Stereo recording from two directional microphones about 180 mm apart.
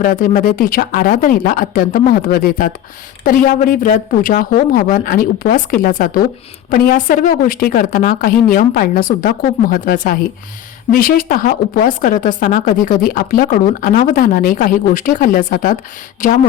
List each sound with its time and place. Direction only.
0.0 s speech: 50° left (ahead or behind)